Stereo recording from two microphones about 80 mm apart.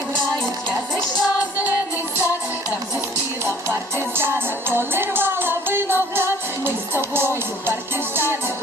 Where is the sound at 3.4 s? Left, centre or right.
Right.